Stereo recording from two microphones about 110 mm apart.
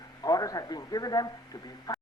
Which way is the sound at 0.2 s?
35° left (ahead or behind).